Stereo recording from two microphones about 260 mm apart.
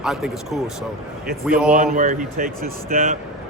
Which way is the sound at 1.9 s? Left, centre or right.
Right.